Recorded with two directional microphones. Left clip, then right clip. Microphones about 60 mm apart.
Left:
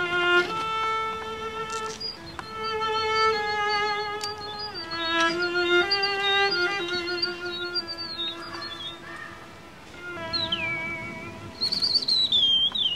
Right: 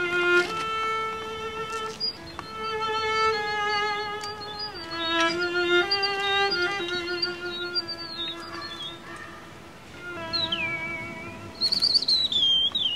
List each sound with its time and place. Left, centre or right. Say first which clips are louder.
0.0 s violin: even; centre
0.4 s violin: even; right
0.7 s music: left 1 dB; centre
10.2 s music: even; centre
11.6 s a sound: right 2 dB; right